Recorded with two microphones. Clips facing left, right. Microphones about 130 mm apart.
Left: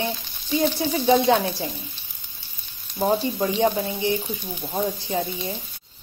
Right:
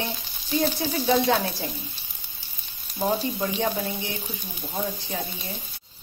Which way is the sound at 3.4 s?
25° left (ahead or behind).